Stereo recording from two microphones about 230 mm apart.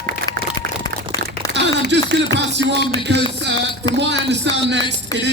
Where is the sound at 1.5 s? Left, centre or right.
Right.